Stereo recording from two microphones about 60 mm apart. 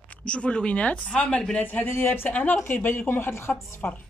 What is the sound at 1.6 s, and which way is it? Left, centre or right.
Speech, left.